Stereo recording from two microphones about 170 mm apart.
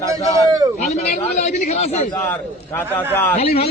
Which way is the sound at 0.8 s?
45° left (ahead or behind).